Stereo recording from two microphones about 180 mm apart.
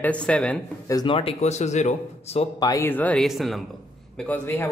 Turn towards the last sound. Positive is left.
turn(degrees=10)  # may be behind; listen again after turning